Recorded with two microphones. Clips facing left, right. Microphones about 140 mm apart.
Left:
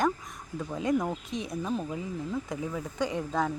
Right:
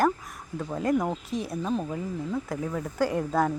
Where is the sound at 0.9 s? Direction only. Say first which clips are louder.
Right 2 dB; 25° right (ahead or behind).